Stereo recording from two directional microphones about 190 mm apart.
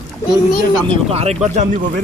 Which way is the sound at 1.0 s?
35° right (ahead or behind).